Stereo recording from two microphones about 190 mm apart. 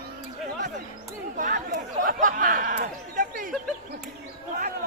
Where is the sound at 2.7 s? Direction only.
50° right (ahead or behind).